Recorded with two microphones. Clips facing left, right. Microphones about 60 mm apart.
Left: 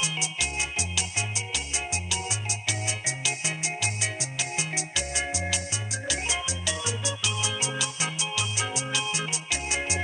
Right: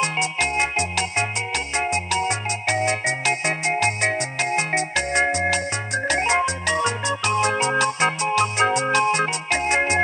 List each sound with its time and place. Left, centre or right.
0.0 s music: right